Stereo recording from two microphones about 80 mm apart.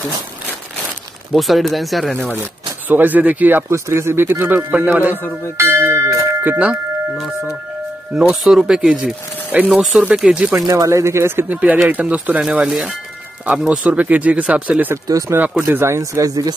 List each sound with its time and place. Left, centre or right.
1.3 s speech: centre
2.9 s speech: right
3.7 s speech: right
8.2 s speech: centre
10.5 s speech: right; by 14.8 s centre
15.2 s speech: right